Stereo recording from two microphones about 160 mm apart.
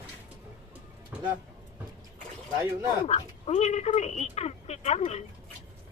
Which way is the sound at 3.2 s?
40° left (ahead or behind).